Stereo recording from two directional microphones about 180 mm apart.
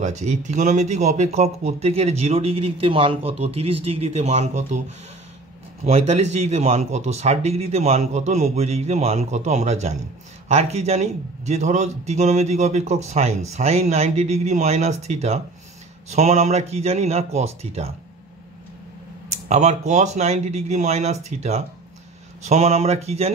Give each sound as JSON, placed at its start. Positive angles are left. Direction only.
{"t": 0.0, "sound": "a man's voice", "side_deg": -40}
{"t": 19.3, "sound": "a man's voice", "side_deg": -40}